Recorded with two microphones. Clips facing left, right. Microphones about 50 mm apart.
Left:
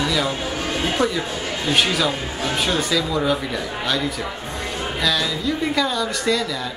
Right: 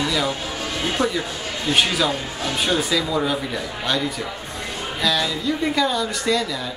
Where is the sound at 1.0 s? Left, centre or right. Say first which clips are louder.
Left 1 dB; centre.